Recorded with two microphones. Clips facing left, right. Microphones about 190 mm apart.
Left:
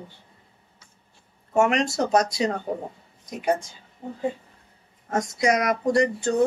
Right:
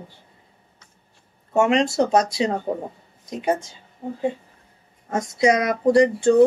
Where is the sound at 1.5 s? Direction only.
25° right (ahead or behind).